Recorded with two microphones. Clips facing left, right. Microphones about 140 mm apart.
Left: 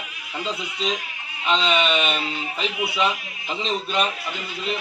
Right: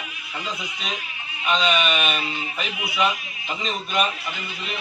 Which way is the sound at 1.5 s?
25° left (ahead or behind).